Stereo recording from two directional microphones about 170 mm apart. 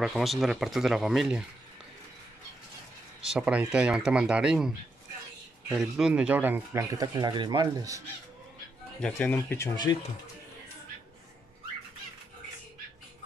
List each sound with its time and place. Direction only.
0.0 s speech: centre (ahead or behind)
3.2 s speech: 5° right (ahead or behind); by 8.0 s 20° right (ahead or behind)
9.0 s speech: 10° left (ahead or behind)